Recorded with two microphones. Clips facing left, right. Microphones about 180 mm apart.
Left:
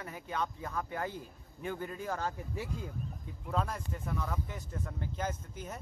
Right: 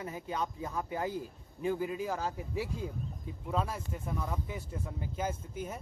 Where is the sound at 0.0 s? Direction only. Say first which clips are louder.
Right 1 dB; 20° right (ahead or behind).